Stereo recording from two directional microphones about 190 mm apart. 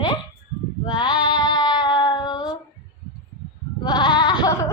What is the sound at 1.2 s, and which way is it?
Female singing, 20° left (ahead or behind).